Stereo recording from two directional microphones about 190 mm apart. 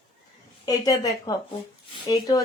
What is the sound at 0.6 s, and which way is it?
A woman's voice, 20° left (ahead or behind).